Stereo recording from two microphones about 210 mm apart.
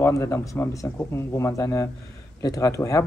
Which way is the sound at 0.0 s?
15° left (ahead or behind).